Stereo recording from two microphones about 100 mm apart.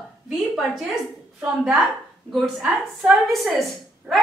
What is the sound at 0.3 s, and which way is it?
A woman's voice, 5° right (ahead or behind).